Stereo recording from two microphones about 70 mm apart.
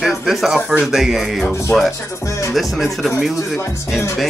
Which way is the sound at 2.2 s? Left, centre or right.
Left.